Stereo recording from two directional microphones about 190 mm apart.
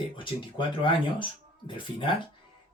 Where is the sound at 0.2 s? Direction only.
25° left (ahead or behind).